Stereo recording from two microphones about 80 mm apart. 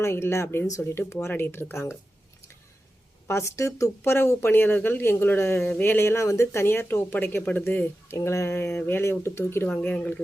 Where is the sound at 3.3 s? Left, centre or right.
Left.